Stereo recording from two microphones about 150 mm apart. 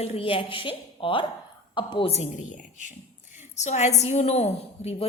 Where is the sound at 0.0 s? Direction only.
40° left (ahead or behind).